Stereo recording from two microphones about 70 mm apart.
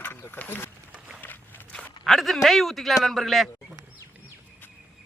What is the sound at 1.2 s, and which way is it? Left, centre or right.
Walk, left.